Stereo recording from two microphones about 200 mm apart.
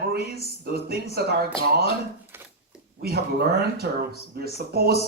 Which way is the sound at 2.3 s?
10° right (ahead or behind).